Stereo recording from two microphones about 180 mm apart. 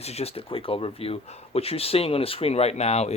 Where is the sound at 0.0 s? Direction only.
35° left (ahead or behind).